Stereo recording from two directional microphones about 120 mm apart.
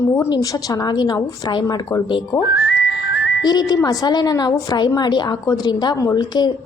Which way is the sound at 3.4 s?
35° left (ahead or behind).